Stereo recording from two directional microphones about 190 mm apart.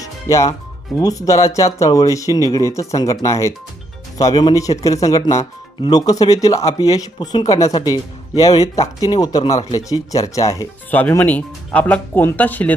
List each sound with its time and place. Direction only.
0.0 s music: 15° left (ahead or behind)
0.9 s speech: 20° left (ahead or behind)